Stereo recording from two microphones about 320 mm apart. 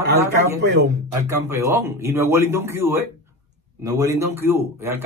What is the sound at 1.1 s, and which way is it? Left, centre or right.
Speech, centre.